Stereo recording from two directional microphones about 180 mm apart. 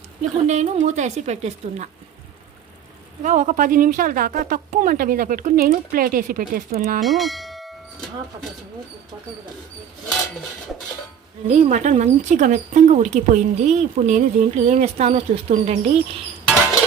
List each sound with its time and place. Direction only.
0.2 s speech: 40° right (ahead or behind)
3.2 s speech: 45° right (ahead or behind)
7.0 s bell: centre (ahead or behind)
11.4 s speech: 40° right (ahead or behind)